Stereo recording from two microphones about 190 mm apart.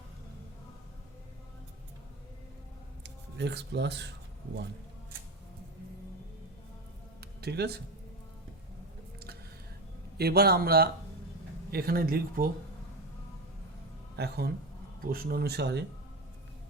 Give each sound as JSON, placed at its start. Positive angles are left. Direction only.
{"t": 3.0, "sound": "speech", "side_deg": -65}
{"t": 7.2, "sound": "music", "side_deg": -60}
{"t": 10.2, "sound": "speech", "side_deg": -55}
{"t": 14.2, "sound": "speech", "side_deg": -55}